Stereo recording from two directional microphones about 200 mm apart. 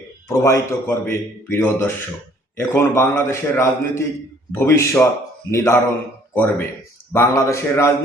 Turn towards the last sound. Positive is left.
turn(degrees=15)  # may be behind; listen again after turning